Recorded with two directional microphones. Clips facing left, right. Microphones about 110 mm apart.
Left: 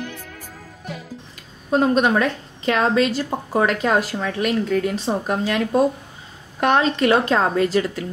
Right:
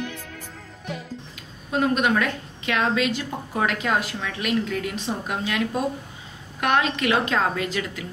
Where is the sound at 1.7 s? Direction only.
35° left (ahead or behind).